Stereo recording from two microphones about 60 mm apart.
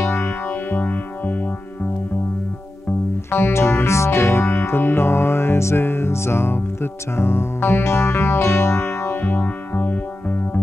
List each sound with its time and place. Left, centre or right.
0.0 s music: left
3.3 s music: left
9.2 s music: left